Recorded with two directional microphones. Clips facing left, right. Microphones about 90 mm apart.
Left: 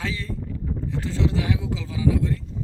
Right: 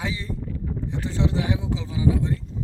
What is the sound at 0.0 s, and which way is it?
Speech, 15° right (ahead or behind).